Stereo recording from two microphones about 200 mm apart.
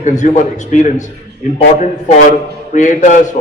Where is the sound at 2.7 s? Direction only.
40° left (ahead or behind).